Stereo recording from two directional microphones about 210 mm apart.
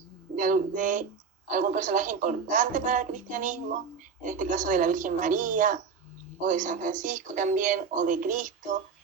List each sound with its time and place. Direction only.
0.3 s speech: 40° right (ahead or behind)